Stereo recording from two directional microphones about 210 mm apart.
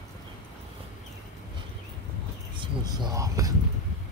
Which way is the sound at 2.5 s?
20° right (ahead or behind).